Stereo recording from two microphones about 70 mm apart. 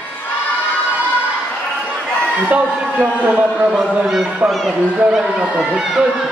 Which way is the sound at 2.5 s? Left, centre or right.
Right.